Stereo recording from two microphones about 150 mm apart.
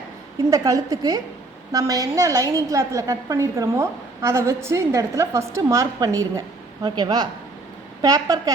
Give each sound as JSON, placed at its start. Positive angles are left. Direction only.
{"t": 0.5, "sound": "a woman's voice", "side_deg": -20}